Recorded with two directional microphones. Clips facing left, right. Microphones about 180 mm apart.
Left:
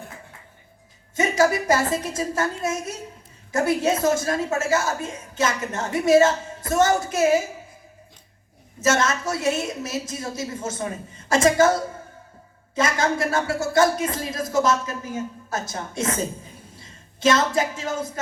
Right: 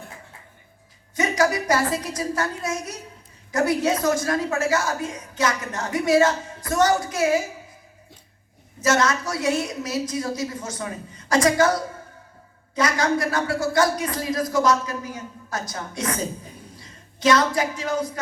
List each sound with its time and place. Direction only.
1.1 s a woman's voice: 25° left (ahead or behind)
8.8 s a woman's voice: 25° left (ahead or behind)